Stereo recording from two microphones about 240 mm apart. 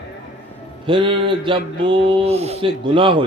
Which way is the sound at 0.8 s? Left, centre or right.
Right.